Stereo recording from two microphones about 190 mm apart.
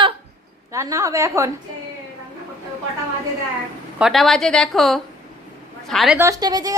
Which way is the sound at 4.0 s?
Centre (ahead or behind).